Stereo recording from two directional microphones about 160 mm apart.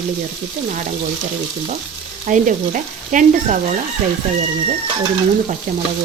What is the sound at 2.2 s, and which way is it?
A woman's voice, 50° right (ahead or behind).